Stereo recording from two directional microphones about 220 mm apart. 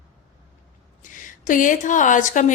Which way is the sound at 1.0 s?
35° left (ahead or behind).